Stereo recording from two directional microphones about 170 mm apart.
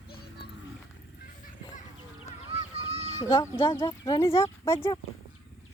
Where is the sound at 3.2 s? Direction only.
20° left (ahead or behind).